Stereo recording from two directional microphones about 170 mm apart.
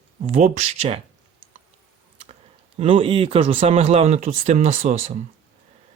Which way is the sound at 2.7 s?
30° right (ahead or behind).